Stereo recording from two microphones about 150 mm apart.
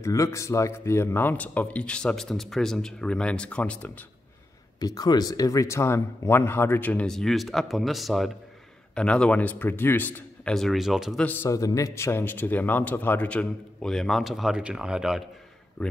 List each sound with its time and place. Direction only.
0.0 s a man's voice: 20° left (ahead or behind)
4.7 s a man's voice: 25° left (ahead or behind); by 11.2 s centre (ahead or behind)
11.2 s a man's voice: 15° left (ahead or behind)